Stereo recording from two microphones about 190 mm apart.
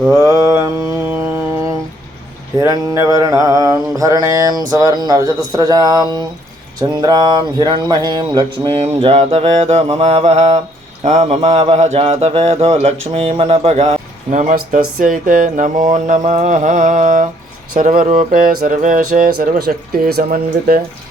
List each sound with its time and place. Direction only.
0.2 s mantra: 15° right (ahead or behind)
2.6 s mantra: 15° right (ahead or behind)
6.7 s a sound: 20° right (ahead or behind)
11.0 s speech: 35° right (ahead or behind); by 20.8 s 50° right (ahead or behind)